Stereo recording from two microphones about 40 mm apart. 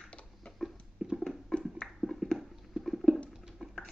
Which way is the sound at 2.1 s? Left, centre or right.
Centre.